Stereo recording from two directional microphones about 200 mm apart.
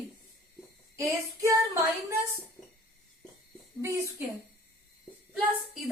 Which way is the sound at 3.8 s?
15° right (ahead or behind).